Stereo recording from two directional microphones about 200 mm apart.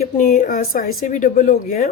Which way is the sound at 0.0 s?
40° left (ahead or behind).